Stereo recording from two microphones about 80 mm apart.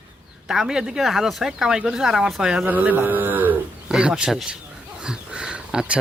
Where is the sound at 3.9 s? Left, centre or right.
Centre.